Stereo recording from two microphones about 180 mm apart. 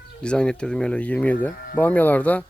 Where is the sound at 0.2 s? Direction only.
5° left (ahead or behind).